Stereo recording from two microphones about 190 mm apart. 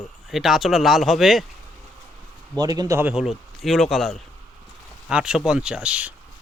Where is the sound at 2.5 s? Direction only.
20° right (ahead or behind).